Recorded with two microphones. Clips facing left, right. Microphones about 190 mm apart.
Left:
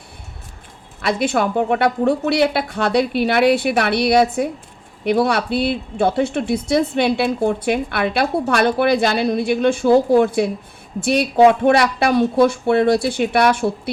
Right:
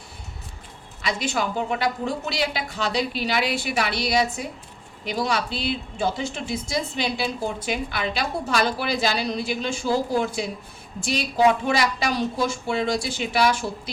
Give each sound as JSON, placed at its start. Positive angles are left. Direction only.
{"t": 1.0, "sound": "a woman's voice", "side_deg": 60}